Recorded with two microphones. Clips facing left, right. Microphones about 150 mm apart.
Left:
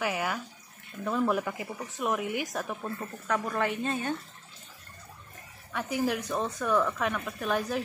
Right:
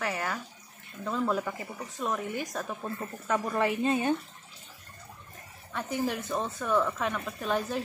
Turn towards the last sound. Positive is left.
turn(degrees=5)  # may be behind; listen again after turning